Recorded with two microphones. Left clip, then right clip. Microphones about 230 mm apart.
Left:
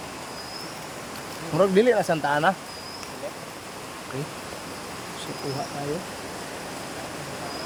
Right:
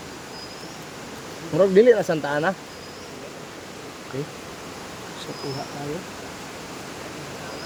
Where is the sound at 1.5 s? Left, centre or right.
Centre.